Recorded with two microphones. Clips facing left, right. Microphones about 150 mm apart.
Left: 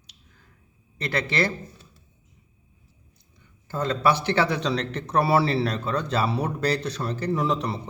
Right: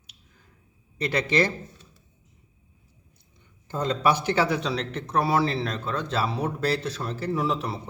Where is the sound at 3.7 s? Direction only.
15° right (ahead or behind).